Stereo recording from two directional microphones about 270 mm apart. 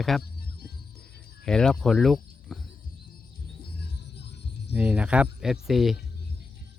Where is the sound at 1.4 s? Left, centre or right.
Centre.